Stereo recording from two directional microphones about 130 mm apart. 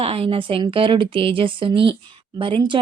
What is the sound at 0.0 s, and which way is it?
Speech, 45° right (ahead or behind).